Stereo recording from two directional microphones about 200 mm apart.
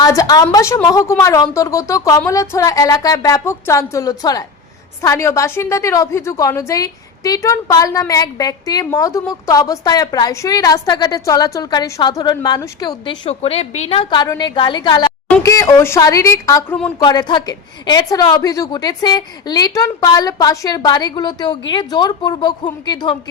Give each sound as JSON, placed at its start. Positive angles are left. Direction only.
{"t": 0.0, "sound": "a woman's voice", "side_deg": 20}